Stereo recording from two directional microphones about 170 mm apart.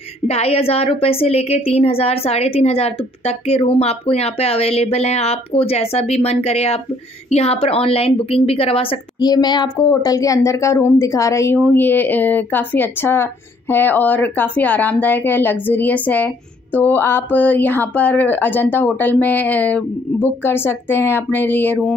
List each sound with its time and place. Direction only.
0.3 s a woman's voice: 35° left (ahead or behind); by 21.9 s 10° left (ahead or behind)